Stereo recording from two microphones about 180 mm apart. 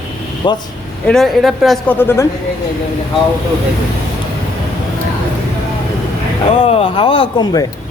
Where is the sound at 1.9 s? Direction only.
15° left (ahead or behind).